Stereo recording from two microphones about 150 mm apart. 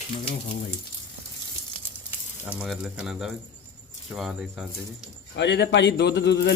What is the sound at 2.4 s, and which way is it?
Speech, 5° right (ahead or behind).